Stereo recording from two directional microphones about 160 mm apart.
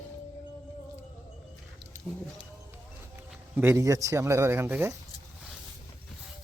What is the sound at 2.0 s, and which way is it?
Speech, 15° left (ahead or behind).